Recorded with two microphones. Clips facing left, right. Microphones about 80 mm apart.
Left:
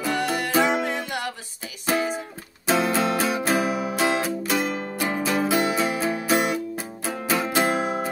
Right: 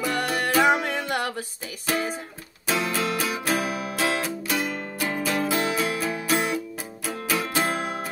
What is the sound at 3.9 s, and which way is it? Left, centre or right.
Music, centre.